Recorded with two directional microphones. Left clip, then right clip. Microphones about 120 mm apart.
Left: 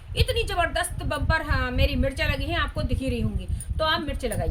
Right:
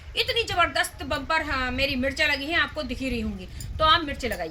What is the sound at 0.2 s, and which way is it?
A woman's voice, 20° left (ahead or behind).